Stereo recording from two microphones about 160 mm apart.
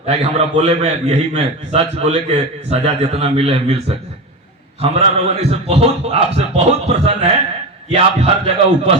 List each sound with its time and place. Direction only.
0.1 s a man's voice: 40° right (ahead or behind)